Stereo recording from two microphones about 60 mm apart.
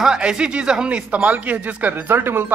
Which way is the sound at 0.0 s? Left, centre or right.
Centre.